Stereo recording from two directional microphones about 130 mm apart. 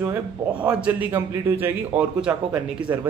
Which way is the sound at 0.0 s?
10° right (ahead or behind).